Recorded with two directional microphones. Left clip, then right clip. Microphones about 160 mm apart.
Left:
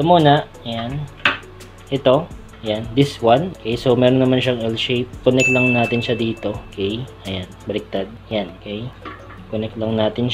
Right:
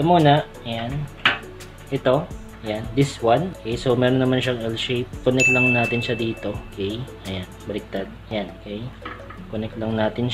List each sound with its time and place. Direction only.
0.0 s speech: centre (ahead or behind)
0.3 s speech: 20° left (ahead or behind)
1.9 s speech: 20° left (ahead or behind)